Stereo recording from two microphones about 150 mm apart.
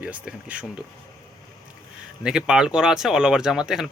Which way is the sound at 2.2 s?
5° right (ahead or behind).